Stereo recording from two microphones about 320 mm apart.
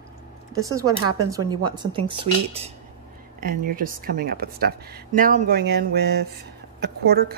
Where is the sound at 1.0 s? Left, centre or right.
Right.